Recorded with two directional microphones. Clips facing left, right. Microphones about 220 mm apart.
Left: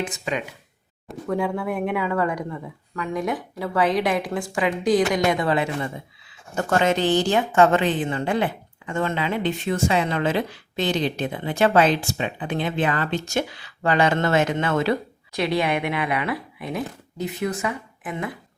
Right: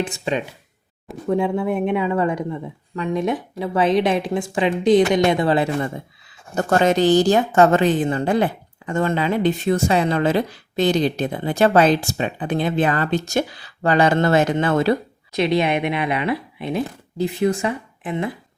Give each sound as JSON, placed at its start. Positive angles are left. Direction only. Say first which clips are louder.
{"t": 0.0, "sound": "speech", "louder": "right 4 dB", "side_deg": -30}
{"t": 15.3, "sound": "speech", "louder": "right 4 dB", "side_deg": -20}